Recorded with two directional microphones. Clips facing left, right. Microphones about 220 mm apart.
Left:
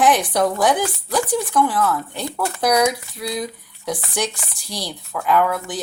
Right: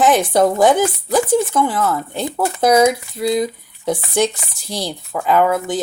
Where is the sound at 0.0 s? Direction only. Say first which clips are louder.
Right 4 dB; 25° right (ahead or behind).